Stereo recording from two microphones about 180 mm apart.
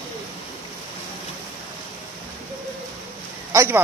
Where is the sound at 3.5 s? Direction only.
15° right (ahead or behind).